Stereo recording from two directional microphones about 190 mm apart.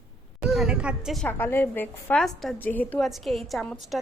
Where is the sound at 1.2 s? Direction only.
10° left (ahead or behind).